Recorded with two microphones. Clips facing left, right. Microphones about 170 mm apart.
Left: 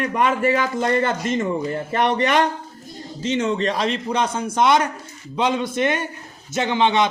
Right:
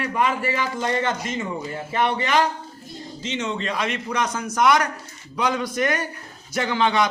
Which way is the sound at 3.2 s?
40° left (ahead or behind).